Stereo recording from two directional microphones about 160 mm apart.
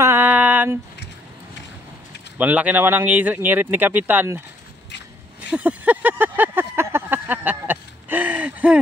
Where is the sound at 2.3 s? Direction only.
10° right (ahead or behind).